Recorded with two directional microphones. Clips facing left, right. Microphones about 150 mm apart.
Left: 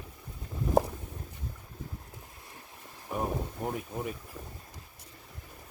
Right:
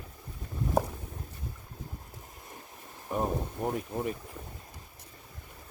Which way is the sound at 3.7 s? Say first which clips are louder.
Right 3 dB; 5° left (ahead or behind).